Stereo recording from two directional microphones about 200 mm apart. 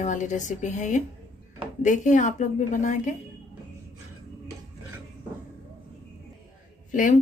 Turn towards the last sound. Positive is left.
turn(degrees=40)  # may be behind; listen again after turning